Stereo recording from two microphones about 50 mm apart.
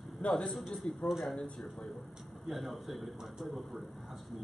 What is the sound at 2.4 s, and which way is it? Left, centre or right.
A man's voice, centre.